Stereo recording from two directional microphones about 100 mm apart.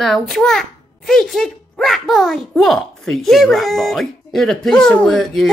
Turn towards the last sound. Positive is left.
turn(degrees=5)  # may be behind; listen again after turning